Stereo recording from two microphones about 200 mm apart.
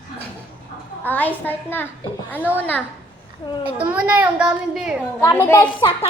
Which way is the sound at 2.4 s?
10° right (ahead or behind).